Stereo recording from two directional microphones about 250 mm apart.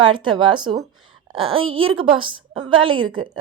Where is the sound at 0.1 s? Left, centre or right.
Centre.